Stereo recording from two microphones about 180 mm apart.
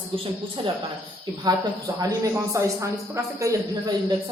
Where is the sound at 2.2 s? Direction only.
20° right (ahead or behind).